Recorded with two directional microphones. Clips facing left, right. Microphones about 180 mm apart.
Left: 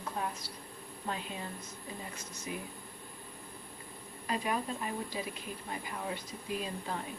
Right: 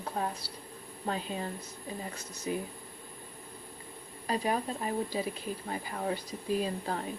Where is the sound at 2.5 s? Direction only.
35° right (ahead or behind).